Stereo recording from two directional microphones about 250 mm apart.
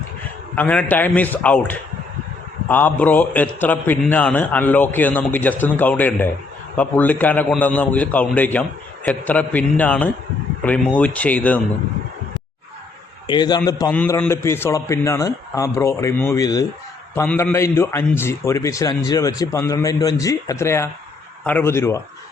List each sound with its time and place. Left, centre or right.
0.5 s a man's voice: centre
13.2 s a man's voice: centre